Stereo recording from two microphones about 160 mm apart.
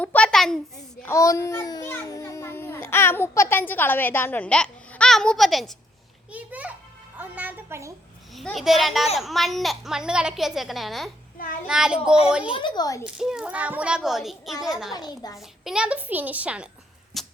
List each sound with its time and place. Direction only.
0.0 s a sound: 10° left (ahead or behind)
1.0 s a child's voice: 20° left (ahead or behind); by 7.9 s 15° right (ahead or behind)
8.4 s a woman's voice: centre (ahead or behind)
12.5 s speech: 30° left (ahead or behind)
13.1 s a woman's voice: 5° right (ahead or behind)
14.9 s speech: 25° left (ahead or behind)
15.4 s a woman's voice: 5° right (ahead or behind)
17.1 s a sound: centre (ahead or behind)